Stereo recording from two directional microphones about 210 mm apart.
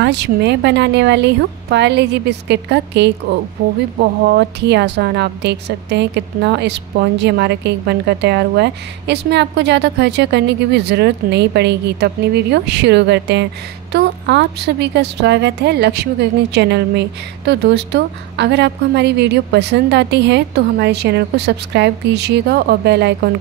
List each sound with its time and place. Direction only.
0.0 s speech: 55° right (ahead or behind)
4.3 s a woman's voice: 55° right (ahead or behind)